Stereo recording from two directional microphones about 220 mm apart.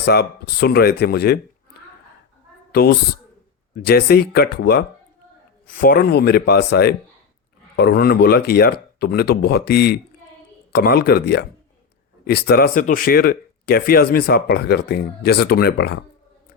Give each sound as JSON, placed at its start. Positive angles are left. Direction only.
{"t": 0.0, "sound": "speech", "side_deg": 45}